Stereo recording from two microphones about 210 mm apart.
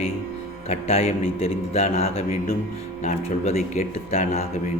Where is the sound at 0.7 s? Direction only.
30° left (ahead or behind).